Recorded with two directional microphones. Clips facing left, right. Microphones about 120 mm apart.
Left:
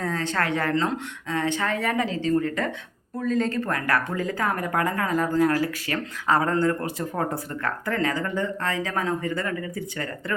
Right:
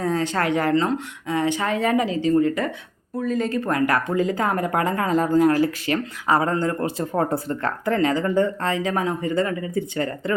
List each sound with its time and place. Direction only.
0.0 s a woman's voice: 15° right (ahead or behind)